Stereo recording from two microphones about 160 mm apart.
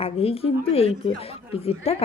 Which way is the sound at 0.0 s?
40° left (ahead or behind).